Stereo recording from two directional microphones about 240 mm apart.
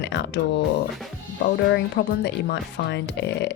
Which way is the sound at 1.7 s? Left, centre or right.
Left.